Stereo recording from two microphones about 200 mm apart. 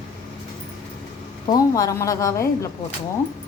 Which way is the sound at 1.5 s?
15° left (ahead or behind).